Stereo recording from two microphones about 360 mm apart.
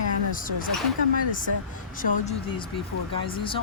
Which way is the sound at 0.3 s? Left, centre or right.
Left.